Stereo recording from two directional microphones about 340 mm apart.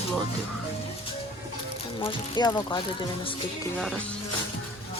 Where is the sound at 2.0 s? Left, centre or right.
Centre.